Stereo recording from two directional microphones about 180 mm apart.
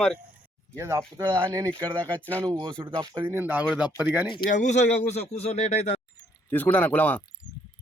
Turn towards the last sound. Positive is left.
turn(degrees=10)  # may be behind; listen again after turning